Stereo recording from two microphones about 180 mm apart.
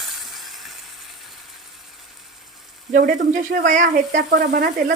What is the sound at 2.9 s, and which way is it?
Speech, 45° right (ahead or behind).